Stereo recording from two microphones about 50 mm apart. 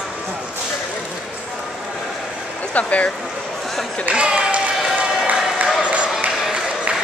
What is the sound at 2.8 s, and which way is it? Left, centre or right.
Speech, left.